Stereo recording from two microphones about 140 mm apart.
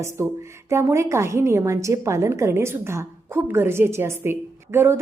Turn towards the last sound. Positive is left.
turn(degrees=-15)  # may be behind; listen again after turning